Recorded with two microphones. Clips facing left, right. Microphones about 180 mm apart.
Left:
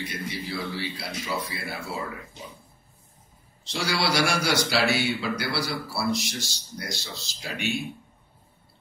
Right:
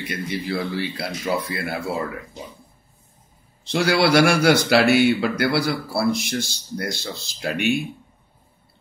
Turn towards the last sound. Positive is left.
turn(degrees=-60)  # may be behind; listen again after turning